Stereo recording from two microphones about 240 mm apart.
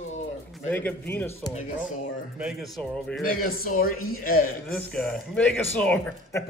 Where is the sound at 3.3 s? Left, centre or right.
Left.